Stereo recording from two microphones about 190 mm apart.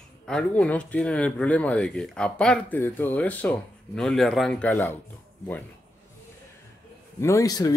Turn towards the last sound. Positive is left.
turn(degrees=20)  # may be behind; listen again after turning